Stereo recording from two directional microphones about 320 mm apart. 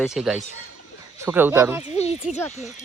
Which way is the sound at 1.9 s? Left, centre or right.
Centre.